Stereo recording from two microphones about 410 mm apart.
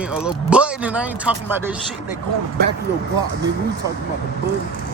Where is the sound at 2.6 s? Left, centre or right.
Right.